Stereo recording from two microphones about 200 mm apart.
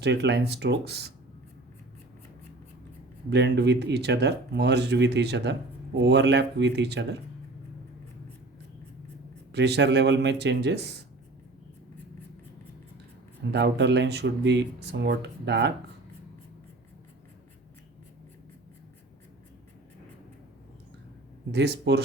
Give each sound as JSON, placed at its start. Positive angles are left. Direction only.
{"t": 0.0, "sound": "speech", "side_deg": -60}
{"t": 3.2, "sound": "speech", "side_deg": -55}
{"t": 9.5, "sound": "speech", "side_deg": -60}
{"t": 13.5, "sound": "speech", "side_deg": -60}
{"t": 21.5, "sound": "speech", "side_deg": -55}